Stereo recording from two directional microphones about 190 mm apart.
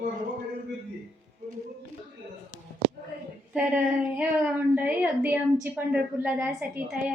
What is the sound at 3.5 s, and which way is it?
A woman's voice, 5° right (ahead or behind).